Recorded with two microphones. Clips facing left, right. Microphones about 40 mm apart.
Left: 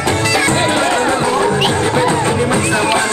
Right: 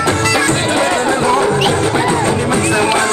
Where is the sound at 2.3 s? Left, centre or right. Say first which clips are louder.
Even; left.